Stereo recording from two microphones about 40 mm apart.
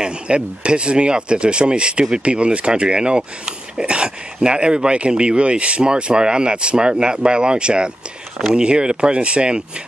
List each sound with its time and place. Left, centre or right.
0.0 s speech: right